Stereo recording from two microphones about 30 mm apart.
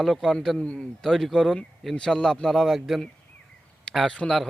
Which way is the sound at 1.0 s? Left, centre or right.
Centre.